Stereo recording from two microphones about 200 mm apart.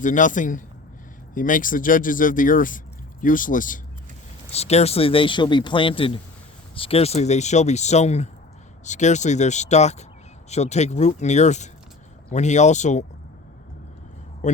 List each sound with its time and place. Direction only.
0.0 s speech: 40° left (ahead or behind)
14.4 s speech: 35° left (ahead or behind)